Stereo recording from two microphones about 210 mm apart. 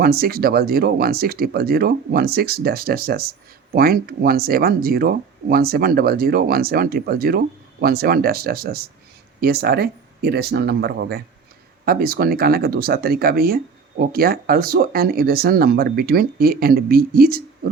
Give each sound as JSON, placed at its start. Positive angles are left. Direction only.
{"t": 0.0, "sound": "speech", "side_deg": -45}